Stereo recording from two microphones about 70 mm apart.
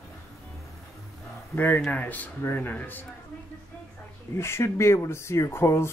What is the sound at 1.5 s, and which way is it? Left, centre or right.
Speech, left.